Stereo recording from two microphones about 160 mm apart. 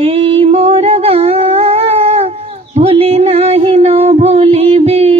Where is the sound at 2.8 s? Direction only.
40° right (ahead or behind).